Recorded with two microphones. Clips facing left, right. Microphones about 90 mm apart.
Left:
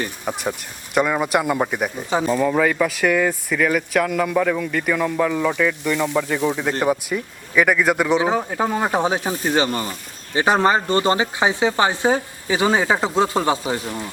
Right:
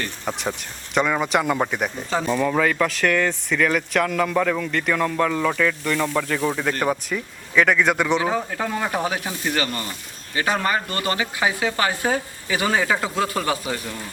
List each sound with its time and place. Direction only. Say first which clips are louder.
0.0 s speech: left 2 dB; 10° left (ahead or behind)
8.2 s speech: left 3 dB; 20° left (ahead or behind)
9.3 s speech: left 4 dB; 35° left (ahead or behind)
9.6 s speech: left 5 dB; 25° left (ahead or behind)